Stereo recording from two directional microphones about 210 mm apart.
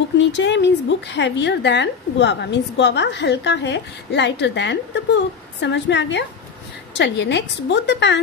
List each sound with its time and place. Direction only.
0.2 s a woman's voice: 55° left (ahead or behind)